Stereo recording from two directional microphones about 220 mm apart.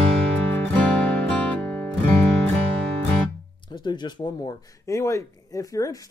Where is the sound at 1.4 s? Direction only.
10° left (ahead or behind).